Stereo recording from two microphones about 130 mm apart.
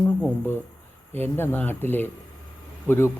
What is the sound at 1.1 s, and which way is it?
Speech, 15° left (ahead or behind).